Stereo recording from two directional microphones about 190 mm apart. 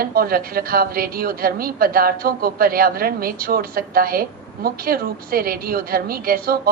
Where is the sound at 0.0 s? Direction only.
50° right (ahead or behind).